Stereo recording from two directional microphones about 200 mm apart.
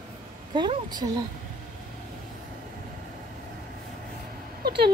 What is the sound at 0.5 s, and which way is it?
Speech, 20° right (ahead or behind).